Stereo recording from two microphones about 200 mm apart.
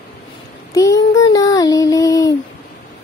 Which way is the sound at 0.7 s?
15° left (ahead or behind).